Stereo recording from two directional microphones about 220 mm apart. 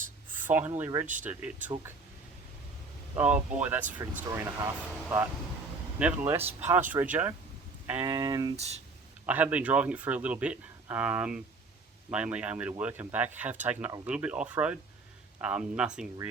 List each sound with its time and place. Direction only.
0.4 s speech: 10° right (ahead or behind)
3.2 s speech: 5° right (ahead or behind)